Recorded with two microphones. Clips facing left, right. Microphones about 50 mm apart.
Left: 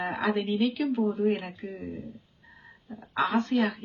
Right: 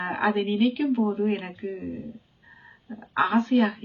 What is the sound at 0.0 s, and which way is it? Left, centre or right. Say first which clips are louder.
A woman's voice: right 3 dB; right.